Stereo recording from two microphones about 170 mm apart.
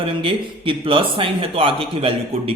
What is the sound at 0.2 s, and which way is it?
A man's voice, 30° right (ahead or behind).